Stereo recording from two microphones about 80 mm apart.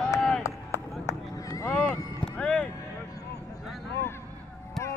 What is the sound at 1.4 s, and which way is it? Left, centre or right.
Honk, left.